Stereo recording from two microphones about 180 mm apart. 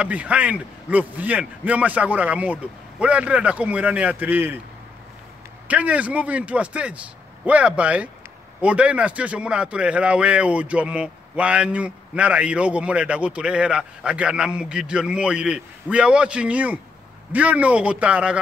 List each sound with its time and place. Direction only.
0.0 s speech: 5° right (ahead or behind)
5.7 s speech: 5° right (ahead or behind)